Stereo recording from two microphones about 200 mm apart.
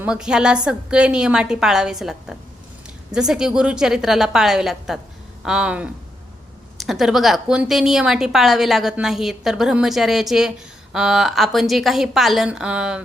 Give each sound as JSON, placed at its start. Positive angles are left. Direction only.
{"t": 0.0, "sound": "a woman's voice", "side_deg": -5}